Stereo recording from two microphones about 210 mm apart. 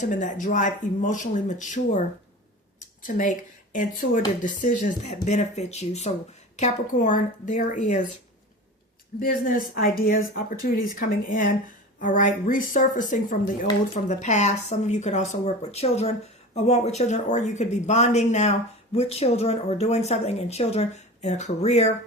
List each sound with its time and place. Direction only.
0.0 s speech: 35° left (ahead or behind)
3.0 s a woman's voice: 40° left (ahead or behind)
9.2 s speech: 45° left (ahead or behind)